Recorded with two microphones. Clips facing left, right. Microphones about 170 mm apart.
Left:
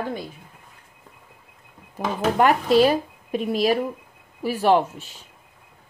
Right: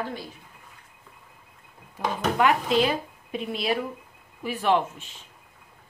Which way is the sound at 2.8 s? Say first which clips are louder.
Left 7 dB; 40° left (ahead or behind).